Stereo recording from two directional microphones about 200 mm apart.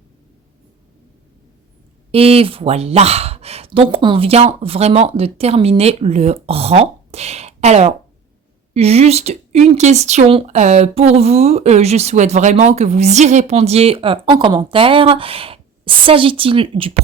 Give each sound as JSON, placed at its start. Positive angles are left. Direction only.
{"t": 2.1, "sound": "speech", "side_deg": -30}